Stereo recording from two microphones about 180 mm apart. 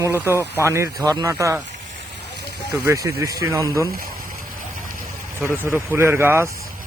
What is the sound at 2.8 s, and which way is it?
Speech, 15° right (ahead or behind).